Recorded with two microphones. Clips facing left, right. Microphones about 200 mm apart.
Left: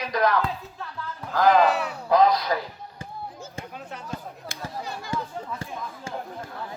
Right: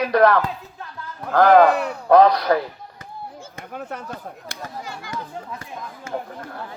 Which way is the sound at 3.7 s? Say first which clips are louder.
Right 9 dB; 60° right (ahead or behind).